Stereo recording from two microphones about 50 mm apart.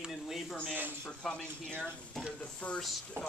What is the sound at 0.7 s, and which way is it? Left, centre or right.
Speech, right.